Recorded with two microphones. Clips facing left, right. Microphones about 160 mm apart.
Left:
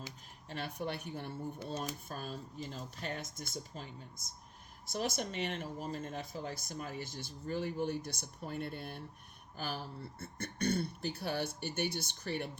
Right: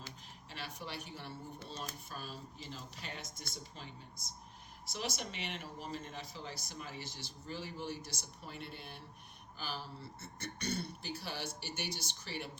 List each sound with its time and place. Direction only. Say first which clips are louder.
0.5 s speech: left 6 dB; 55° left (ahead or behind)